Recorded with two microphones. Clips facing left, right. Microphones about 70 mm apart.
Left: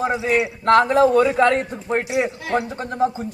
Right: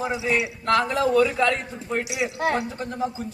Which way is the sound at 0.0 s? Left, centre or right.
Left.